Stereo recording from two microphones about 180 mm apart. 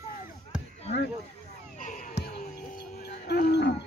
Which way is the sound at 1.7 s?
45° left (ahead or behind).